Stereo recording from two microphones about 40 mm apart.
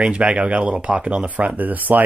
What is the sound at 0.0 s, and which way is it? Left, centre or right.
Speech, right.